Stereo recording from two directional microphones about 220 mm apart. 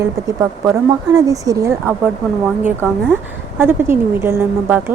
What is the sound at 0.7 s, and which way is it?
A woman's voice, 15° right (ahead or behind).